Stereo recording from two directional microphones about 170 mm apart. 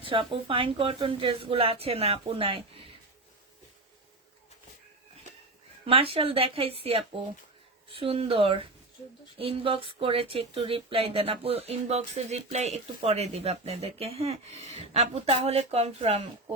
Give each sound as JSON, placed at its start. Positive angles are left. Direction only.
{"t": 0.0, "sound": "speech", "side_deg": -30}
{"t": 5.8, "sound": "speech", "side_deg": -35}